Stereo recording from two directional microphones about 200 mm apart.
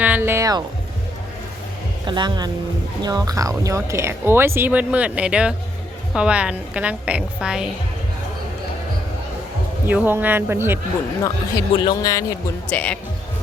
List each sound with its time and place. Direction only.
0.0 s a sound: 10° right (ahead or behind)
2.0 s a woman's voice: 20° right (ahead or behind); by 7.7 s 5° right (ahead or behind)
9.8 s speech: 10° right (ahead or behind)
11.8 s speech: 20° left (ahead or behind)
12.6 s speech: 5° left (ahead or behind)